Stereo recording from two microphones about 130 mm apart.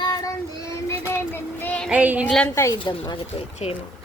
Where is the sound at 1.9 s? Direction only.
10° right (ahead or behind).